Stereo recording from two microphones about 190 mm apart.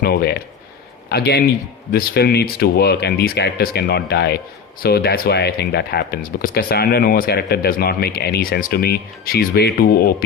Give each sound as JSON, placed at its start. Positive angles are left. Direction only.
{"t": 0.0, "sound": "speech", "side_deg": 55}